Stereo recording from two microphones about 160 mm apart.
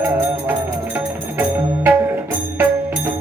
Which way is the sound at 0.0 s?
10° right (ahead or behind).